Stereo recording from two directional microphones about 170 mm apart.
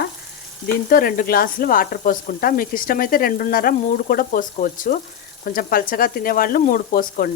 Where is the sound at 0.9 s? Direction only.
55° left (ahead or behind).